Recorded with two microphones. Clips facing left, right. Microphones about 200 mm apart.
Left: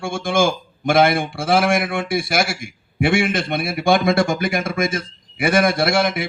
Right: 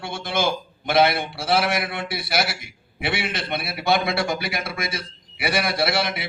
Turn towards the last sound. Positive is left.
turn(degrees=50)  # may be behind; listen again after turning